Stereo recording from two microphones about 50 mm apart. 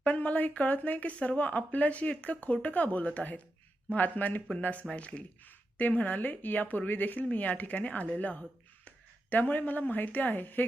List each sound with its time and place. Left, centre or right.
0.0 s speech: left